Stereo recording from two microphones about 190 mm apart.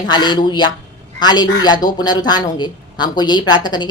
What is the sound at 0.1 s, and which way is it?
A woman's voice, 25° left (ahead or behind).